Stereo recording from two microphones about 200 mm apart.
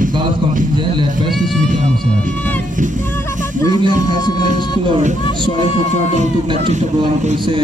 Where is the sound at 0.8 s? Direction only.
25° right (ahead or behind).